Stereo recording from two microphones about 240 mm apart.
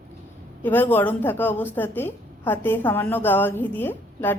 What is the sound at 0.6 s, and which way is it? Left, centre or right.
A woman's voice, centre.